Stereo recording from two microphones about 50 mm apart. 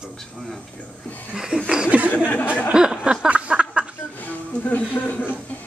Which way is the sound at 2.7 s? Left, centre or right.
Centre.